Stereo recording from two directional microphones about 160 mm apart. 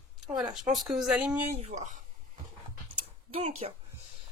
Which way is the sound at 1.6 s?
45° right (ahead or behind).